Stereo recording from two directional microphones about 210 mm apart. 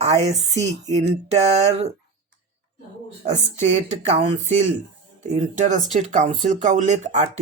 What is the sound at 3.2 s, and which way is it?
Speech, 30° right (ahead or behind).